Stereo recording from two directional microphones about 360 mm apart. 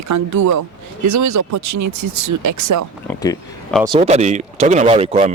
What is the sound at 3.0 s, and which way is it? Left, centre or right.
Speech, centre.